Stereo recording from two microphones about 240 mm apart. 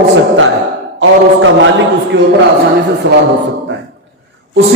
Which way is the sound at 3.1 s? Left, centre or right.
Right.